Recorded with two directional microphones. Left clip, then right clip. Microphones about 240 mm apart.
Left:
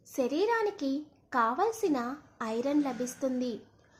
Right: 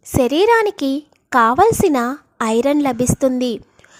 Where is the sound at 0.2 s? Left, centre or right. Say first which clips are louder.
Right 15 dB; right.